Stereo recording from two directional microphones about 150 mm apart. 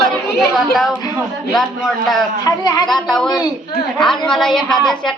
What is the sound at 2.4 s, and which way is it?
Speech, 25° left (ahead or behind).